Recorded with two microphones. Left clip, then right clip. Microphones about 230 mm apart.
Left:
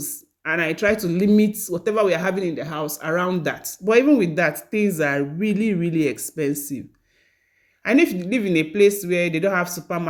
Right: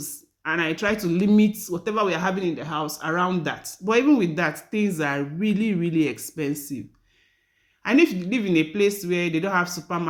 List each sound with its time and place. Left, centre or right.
0.0 s a woman's voice: centre